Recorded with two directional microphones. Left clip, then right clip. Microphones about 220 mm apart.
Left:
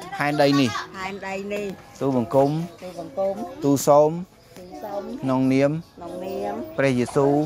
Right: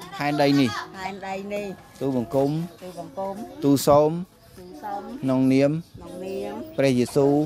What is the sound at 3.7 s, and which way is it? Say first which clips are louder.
Speech: left 2 dB; 40° right (ahead or behind).